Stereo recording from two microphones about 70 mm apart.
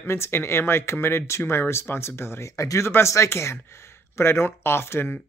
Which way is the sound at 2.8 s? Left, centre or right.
Left.